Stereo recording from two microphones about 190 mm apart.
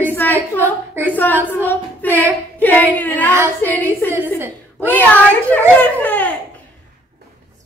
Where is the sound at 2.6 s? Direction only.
10° left (ahead or behind).